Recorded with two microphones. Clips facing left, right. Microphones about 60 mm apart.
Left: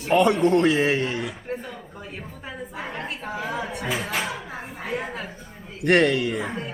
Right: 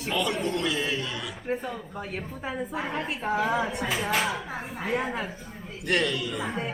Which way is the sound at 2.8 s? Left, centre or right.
Centre.